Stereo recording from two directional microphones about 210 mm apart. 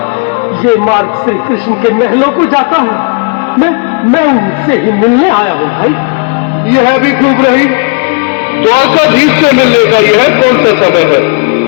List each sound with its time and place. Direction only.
8.8 s speech: 45° left (ahead or behind)